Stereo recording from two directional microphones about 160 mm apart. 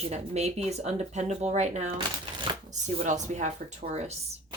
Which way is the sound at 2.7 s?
50° right (ahead or behind).